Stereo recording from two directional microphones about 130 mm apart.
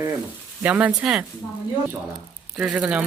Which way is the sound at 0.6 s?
10° right (ahead or behind).